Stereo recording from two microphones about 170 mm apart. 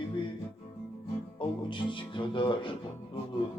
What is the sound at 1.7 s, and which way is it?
Music, 30° left (ahead or behind).